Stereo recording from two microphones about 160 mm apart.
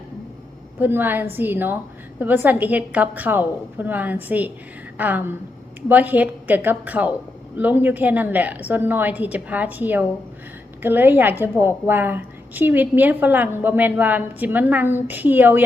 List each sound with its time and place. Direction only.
0.8 s a woman's voice: 10° right (ahead or behind)